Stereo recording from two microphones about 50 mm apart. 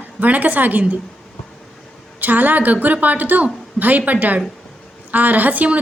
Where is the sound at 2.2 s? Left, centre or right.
Right.